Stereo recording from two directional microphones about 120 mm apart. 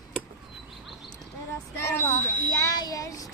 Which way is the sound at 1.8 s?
20° left (ahead or behind).